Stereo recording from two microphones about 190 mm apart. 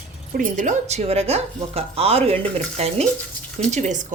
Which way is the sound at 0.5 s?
40° right (ahead or behind).